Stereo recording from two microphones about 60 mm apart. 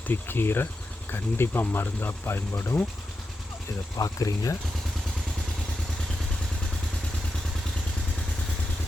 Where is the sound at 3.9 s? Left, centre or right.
Left.